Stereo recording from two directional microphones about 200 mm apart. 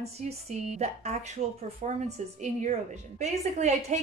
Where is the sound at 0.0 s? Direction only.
30° right (ahead or behind).